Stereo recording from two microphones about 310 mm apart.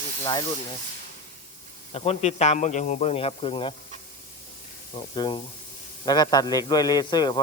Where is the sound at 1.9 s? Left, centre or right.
Centre.